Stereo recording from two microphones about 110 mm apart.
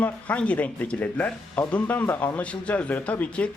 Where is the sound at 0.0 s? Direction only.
10° left (ahead or behind).